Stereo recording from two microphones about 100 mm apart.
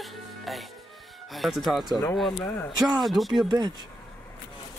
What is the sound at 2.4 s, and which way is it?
Speech, 25° left (ahead or behind).